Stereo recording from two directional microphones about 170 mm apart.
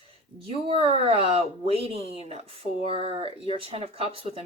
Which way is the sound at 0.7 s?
35° right (ahead or behind).